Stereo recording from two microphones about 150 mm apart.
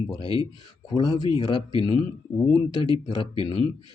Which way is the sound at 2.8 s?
35° left (ahead or behind).